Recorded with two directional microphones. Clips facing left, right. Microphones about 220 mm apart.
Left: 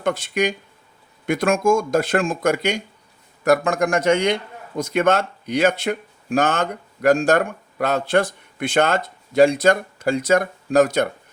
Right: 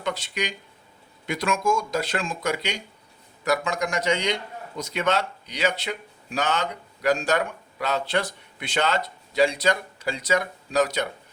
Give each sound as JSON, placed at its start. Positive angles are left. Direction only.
{"t": 0.0, "sound": "speech", "side_deg": 50}